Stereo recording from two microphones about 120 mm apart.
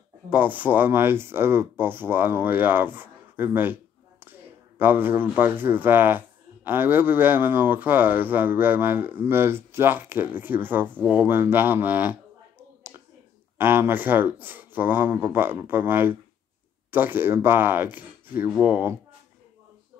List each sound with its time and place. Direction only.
0.3 s speech: 15° right (ahead or behind)
11.1 s a sound: 15° right (ahead or behind)
13.6 s speech: 15° right (ahead or behind)